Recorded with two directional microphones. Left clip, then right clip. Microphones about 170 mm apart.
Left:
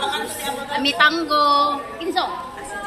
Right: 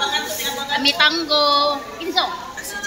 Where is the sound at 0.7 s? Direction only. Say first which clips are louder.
Even; 15° right (ahead or behind).